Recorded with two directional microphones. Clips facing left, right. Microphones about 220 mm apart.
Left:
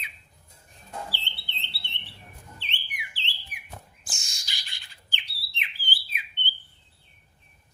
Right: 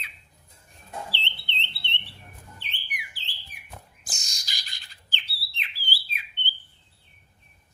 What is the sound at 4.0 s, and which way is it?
Bird, 40° right (ahead or behind).